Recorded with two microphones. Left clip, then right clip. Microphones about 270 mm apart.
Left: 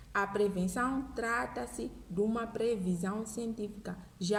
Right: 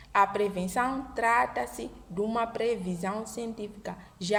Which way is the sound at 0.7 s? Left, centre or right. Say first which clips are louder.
Right 5 dB; right.